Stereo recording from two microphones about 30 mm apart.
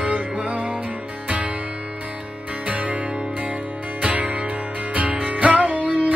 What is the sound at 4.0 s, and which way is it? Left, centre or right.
Music, right.